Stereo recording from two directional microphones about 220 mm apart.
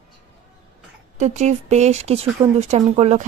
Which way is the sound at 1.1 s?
30° right (ahead or behind).